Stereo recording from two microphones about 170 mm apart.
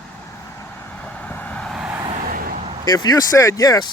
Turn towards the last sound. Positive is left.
turn(degrees=20)  # may be behind; listen again after turning